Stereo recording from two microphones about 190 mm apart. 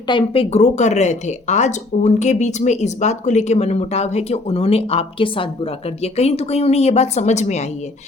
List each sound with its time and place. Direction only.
0.1 s speech: 25° left (ahead or behind)